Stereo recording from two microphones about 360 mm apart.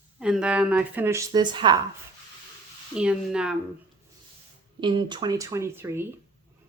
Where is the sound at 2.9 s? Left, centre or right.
Centre.